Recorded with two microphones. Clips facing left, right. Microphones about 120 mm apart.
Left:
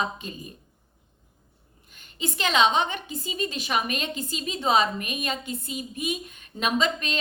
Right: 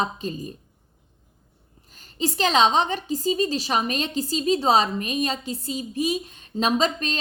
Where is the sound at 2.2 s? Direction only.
35° right (ahead or behind).